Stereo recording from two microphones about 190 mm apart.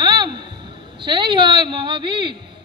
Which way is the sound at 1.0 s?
25° right (ahead or behind).